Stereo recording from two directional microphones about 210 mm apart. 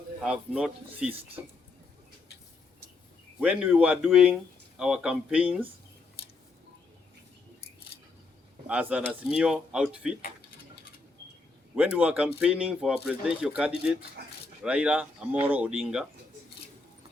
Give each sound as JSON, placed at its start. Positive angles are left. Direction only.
{"t": 0.2, "sound": "speech", "side_deg": -5}
{"t": 1.4, "sound": "speech", "side_deg": -15}
{"t": 3.4, "sound": "speech", "side_deg": -5}
{"t": 8.6, "sound": "speech", "side_deg": -5}
{"t": 11.8, "sound": "speech", "side_deg": -5}